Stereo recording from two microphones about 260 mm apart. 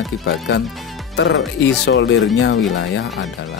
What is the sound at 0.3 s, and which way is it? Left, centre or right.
Speech, left.